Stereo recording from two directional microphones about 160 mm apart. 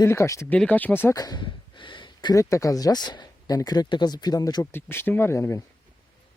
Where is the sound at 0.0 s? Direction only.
20° left (ahead or behind).